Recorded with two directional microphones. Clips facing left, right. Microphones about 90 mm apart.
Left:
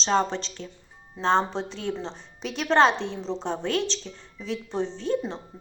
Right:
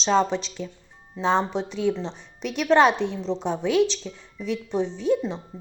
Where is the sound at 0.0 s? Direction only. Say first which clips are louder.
Right 3 dB; 5° right (ahead or behind).